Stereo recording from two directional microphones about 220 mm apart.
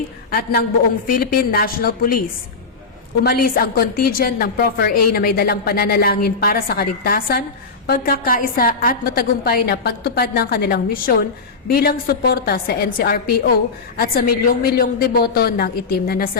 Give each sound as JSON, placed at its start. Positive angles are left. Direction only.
{"t": 0.3, "sound": "a woman's voice", "side_deg": 45}
{"t": 3.2, "sound": "a woman's voice", "side_deg": 45}